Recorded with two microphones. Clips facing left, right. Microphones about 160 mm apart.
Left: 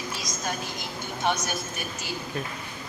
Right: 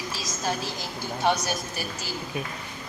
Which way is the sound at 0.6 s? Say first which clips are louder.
Right 2 dB; 35° right (ahead or behind).